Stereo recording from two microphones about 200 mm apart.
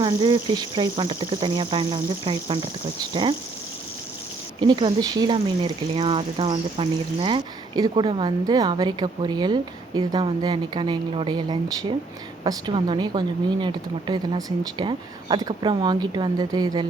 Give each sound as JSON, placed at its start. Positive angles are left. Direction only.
{"t": 0.0, "sound": "speech", "side_deg": -20}
{"t": 4.6, "sound": "speech", "side_deg": -25}